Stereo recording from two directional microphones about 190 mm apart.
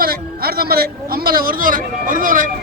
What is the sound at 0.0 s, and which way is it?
A man's voice, 50° right (ahead or behind).